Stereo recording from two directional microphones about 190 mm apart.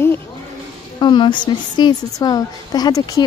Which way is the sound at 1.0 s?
25° left (ahead or behind).